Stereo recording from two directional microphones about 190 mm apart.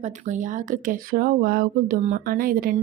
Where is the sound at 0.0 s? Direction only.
40° right (ahead or behind).